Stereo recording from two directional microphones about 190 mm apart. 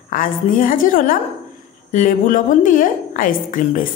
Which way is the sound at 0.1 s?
45° left (ahead or behind).